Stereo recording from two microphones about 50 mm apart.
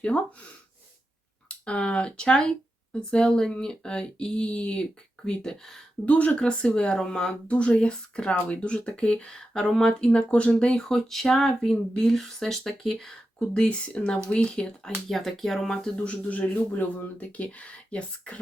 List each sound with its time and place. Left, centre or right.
0.0 s speech: left
6.1 s speech: left
10.8 s speech: centre
15.1 s speech: centre
16.0 s speech: left